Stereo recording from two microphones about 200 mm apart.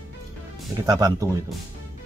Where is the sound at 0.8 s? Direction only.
20° right (ahead or behind).